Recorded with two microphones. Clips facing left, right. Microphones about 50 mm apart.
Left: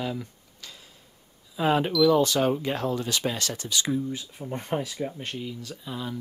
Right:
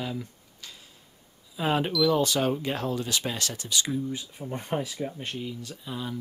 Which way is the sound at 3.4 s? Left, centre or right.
Left.